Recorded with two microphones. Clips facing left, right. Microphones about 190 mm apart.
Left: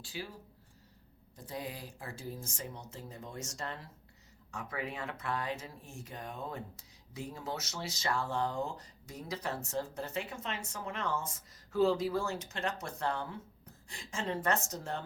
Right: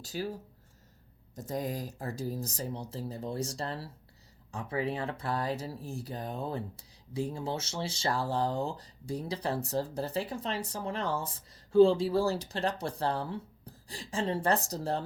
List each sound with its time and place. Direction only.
0.0 s speech: 40° right (ahead or behind)
1.4 s speech: 45° right (ahead or behind)